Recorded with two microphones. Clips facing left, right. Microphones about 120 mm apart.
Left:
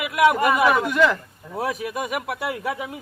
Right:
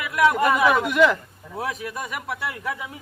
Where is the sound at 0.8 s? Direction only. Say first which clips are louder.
Right 1 dB; 15° right (ahead or behind).